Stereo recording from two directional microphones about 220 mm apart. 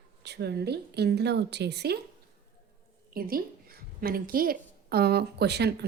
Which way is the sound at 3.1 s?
40° right (ahead or behind).